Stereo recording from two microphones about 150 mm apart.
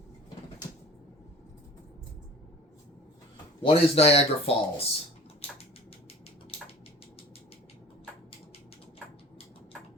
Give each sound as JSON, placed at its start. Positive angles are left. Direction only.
{"t": 3.6, "sound": "speech", "side_deg": 40}